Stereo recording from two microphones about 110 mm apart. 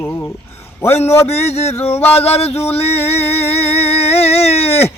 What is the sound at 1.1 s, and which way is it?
A man's voice, 20° left (ahead or behind).